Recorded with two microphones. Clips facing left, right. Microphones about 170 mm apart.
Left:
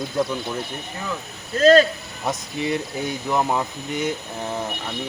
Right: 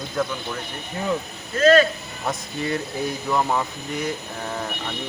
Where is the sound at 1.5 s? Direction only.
35° left (ahead or behind).